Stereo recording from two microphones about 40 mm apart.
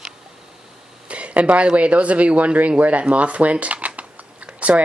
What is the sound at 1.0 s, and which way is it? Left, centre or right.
Speech, right.